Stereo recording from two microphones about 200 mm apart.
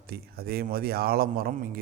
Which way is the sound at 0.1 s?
50° right (ahead or behind).